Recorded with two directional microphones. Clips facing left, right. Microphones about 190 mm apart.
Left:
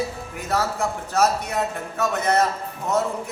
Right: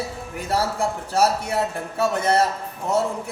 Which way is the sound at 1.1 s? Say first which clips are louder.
Even; 30° right (ahead or behind).